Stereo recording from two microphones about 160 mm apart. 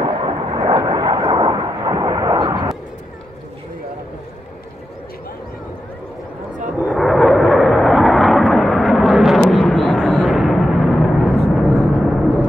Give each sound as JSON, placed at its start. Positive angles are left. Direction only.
{"t": 0.0, "sound": "vehicle", "side_deg": -30}
{"t": 6.8, "sound": "vehicle", "side_deg": 0}